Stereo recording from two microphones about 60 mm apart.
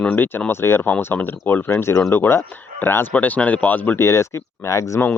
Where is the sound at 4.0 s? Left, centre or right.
Left.